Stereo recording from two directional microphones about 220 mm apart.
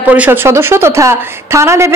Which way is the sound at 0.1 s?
10° right (ahead or behind).